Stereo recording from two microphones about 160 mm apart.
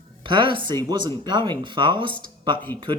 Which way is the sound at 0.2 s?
30° right (ahead or behind).